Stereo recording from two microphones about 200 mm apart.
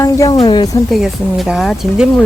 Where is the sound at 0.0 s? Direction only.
15° left (ahead or behind).